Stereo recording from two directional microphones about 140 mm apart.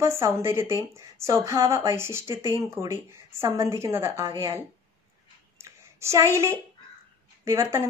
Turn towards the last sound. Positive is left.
turn(degrees=-20)  # may be behind; listen again after turning